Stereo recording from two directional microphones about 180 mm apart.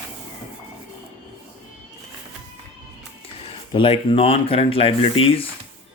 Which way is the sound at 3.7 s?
30° left (ahead or behind).